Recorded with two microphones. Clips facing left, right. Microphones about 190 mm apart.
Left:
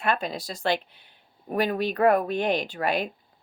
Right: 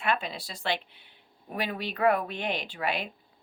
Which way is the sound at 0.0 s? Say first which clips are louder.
Left 3 dB; 40° left (ahead or behind).